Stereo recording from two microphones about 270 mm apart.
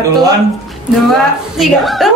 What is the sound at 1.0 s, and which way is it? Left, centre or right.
A woman's voice, centre.